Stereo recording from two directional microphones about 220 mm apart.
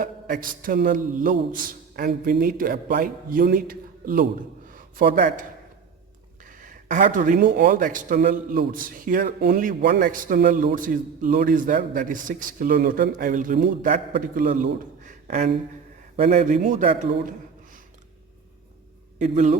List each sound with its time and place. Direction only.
0.0 s speech: 40° right (ahead or behind)
6.4 s a man's voice: 35° right (ahead or behind)
19.2 s speech: 30° right (ahead or behind)